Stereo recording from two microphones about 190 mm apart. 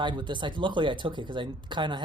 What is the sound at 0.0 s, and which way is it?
Speech, 25° right (ahead or behind).